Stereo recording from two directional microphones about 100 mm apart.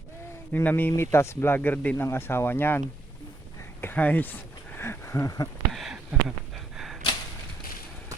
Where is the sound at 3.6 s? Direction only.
20° left (ahead or behind).